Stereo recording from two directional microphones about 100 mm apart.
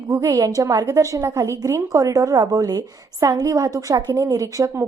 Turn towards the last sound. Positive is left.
turn(degrees=-35)  # may be behind; listen again after turning